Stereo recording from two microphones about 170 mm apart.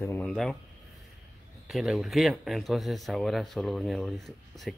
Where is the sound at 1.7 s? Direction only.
5° right (ahead or behind).